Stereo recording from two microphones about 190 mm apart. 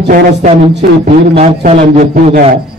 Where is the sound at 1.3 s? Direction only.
30° right (ahead or behind); by 2.4 s 45° right (ahead or behind).